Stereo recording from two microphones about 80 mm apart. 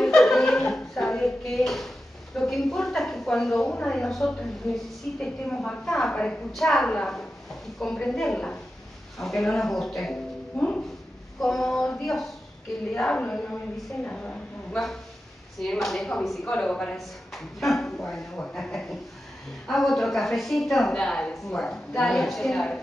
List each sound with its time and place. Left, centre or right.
0.0 s music: centre
2.3 s a woman's voice: centre
6.5 s a woman's voice: centre
15.6 s a woman's voice: centre
16.9 s a woman's voice: centre